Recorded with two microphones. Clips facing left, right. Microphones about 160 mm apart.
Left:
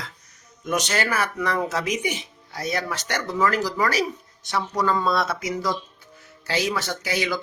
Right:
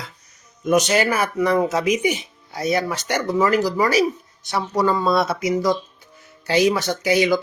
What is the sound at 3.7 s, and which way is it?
Speech, 10° right (ahead or behind).